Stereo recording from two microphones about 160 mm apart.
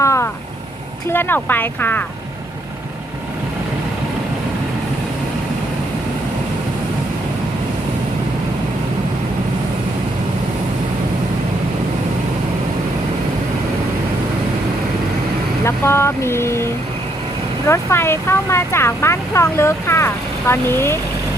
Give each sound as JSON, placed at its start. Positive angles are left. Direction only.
{"t": 0.0, "sound": "vehicle", "side_deg": 15}
{"t": 1.1, "sound": "speech", "side_deg": 15}
{"t": 15.6, "sound": "speech", "side_deg": 15}
{"t": 17.7, "sound": "speech", "side_deg": 15}